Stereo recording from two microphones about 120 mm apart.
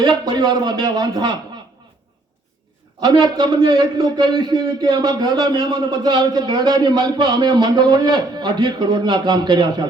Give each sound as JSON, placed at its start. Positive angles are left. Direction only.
{"t": 0.0, "sound": "a man's voice", "side_deg": -40}
{"t": 3.0, "sound": "a man's voice", "side_deg": -40}